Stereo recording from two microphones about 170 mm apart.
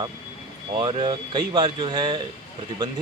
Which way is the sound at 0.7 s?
30° right (ahead or behind).